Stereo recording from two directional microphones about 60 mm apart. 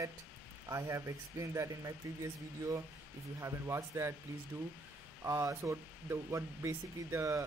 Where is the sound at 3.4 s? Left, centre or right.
Right.